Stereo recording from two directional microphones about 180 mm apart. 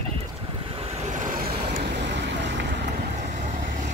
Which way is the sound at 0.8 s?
45° right (ahead or behind).